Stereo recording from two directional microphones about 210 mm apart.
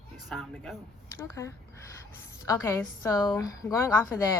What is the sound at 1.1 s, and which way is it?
Speech, 15° left (ahead or behind).